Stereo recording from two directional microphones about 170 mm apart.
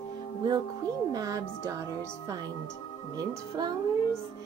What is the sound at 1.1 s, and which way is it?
Speech, 20° right (ahead or behind).